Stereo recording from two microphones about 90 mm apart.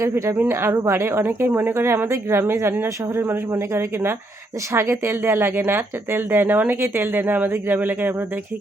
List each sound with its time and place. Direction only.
0.0 s speech: 30° right (ahead or behind)